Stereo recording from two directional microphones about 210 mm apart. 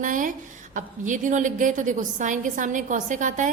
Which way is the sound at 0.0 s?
40° right (ahead or behind).